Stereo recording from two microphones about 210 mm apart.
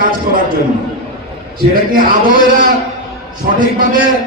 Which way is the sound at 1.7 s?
40° right (ahead or behind).